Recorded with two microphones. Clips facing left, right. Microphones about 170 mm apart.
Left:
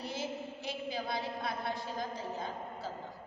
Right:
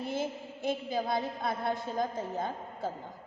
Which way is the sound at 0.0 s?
50° right (ahead or behind).